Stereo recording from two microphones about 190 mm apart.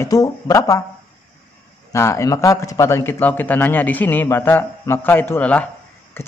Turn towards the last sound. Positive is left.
turn(degrees=10)  # may be behind; listen again after turning